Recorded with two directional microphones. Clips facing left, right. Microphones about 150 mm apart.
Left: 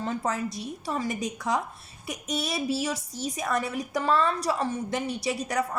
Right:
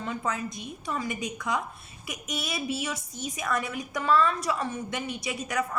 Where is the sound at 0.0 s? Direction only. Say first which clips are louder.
Left 3 dB; 35° left (ahead or behind).